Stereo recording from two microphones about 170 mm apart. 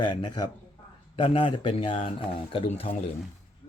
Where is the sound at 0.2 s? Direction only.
25° left (ahead or behind).